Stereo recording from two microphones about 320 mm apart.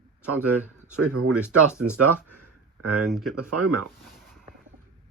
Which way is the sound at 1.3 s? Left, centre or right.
Centre.